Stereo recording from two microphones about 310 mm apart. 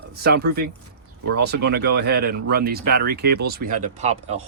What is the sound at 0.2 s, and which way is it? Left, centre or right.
Speech, right.